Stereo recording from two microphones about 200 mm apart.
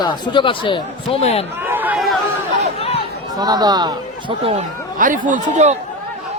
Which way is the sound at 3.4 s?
20° right (ahead or behind).